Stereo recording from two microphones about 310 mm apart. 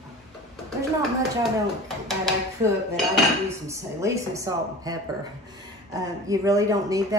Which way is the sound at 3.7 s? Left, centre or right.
Centre.